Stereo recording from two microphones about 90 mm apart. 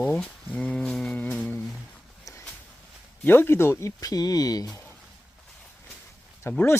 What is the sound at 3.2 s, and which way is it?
Speech, 25° left (ahead or behind).